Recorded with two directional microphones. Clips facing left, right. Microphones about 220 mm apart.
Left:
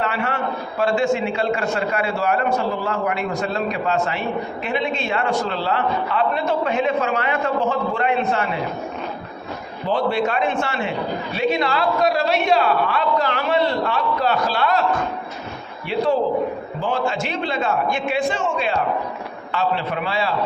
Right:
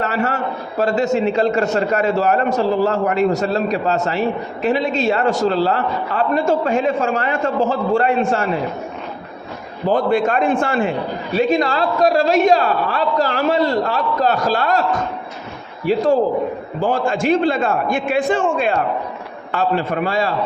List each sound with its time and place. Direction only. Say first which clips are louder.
0.0 s a man's voice: right 3 dB; 40° right (ahead or behind)
9.9 s a man's voice: right 4 dB; 50° right (ahead or behind)
16.8 s a man's voice: right 6 dB; 50° right (ahead or behind)